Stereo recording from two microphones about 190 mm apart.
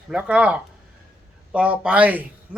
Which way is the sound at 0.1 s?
5° right (ahead or behind).